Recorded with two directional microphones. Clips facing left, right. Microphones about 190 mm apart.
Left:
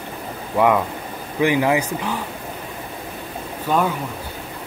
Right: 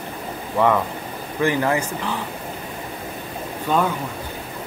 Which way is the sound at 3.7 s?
5° left (ahead or behind).